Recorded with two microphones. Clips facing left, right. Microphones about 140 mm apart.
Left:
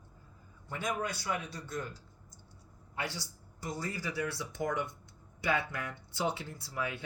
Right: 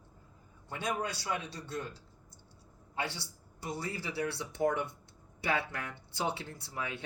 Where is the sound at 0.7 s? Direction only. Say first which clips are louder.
Even; 25° right (ahead or behind).